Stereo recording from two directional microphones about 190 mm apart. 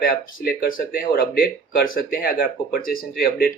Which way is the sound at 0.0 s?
50° left (ahead or behind).